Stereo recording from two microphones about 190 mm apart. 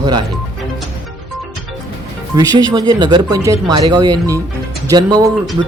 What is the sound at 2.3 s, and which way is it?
Speech, 20° right (ahead or behind).